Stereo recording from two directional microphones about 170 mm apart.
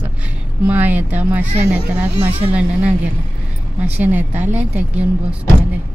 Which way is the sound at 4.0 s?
10° right (ahead or behind).